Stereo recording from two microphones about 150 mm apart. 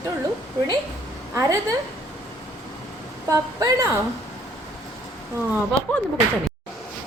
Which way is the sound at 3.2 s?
20° right (ahead or behind).